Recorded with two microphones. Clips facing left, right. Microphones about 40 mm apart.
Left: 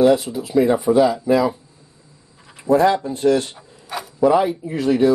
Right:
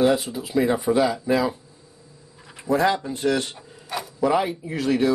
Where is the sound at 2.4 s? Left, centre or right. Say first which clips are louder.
Left 2 dB; centre.